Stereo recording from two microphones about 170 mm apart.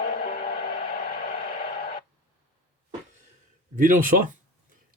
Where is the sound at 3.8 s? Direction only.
55° right (ahead or behind).